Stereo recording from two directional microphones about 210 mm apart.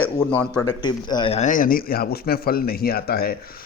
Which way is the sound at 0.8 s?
20° left (ahead or behind).